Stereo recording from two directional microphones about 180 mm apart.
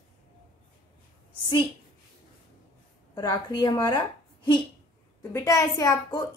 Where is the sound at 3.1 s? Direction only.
25° left (ahead or behind).